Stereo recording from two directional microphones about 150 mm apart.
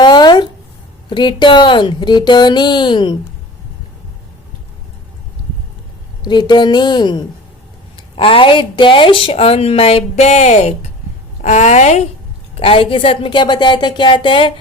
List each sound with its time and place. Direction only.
0.0 s a sound: 30° left (ahead or behind)
1.1 s speech: 30° left (ahead or behind)
6.2 s a woman's voice: 30° left (ahead or behind); by 12.0 s 50° left (ahead or behind)
12.5 s speech: 40° left (ahead or behind)